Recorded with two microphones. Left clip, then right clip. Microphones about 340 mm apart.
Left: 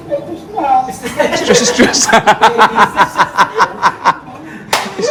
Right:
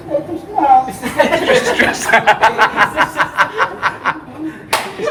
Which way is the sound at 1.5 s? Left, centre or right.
Centre.